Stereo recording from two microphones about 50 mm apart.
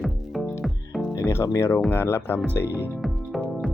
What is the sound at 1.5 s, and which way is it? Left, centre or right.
Speech, left.